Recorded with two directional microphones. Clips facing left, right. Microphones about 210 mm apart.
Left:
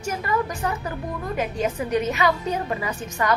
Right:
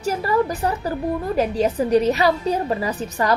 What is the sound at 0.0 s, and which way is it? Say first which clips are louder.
A woman's voice: right 5 dB; 35° right (ahead or behind).